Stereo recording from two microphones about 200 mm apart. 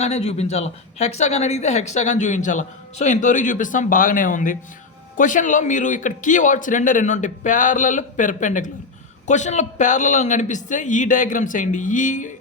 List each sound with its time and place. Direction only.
0.0 s speech: 30° left (ahead or behind)